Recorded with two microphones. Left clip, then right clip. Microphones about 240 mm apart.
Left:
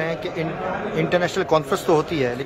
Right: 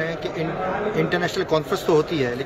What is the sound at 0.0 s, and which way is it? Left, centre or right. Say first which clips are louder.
A man's voice: left 1 dB; centre.